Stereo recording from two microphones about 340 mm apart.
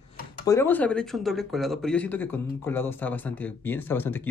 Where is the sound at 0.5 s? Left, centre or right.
Centre.